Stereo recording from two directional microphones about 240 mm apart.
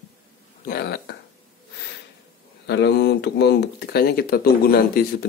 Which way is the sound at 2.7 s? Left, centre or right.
Left.